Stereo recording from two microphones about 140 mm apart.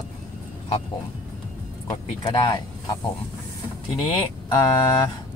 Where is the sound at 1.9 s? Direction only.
30° left (ahead or behind).